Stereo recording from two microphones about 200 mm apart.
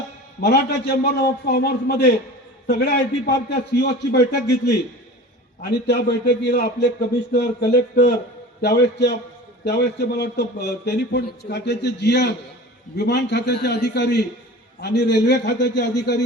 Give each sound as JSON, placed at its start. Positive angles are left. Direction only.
{"t": 0.4, "sound": "a man's voice", "side_deg": 55}
{"t": 5.8, "sound": "a man's voice", "side_deg": 55}